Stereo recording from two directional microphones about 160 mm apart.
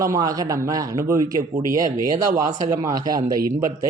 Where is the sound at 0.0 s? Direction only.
20° right (ahead or behind).